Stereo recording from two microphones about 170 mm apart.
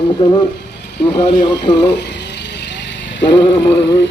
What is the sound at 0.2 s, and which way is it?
Music, 25° left (ahead or behind).